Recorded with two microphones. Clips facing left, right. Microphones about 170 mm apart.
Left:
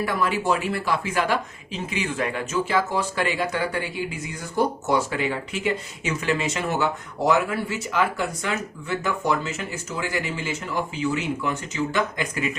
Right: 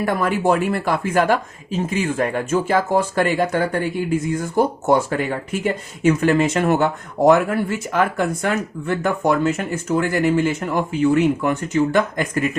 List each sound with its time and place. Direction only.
0.0 s speech: 50° right (ahead or behind)